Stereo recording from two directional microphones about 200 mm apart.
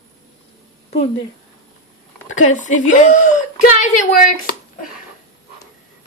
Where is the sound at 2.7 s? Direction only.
35° left (ahead or behind).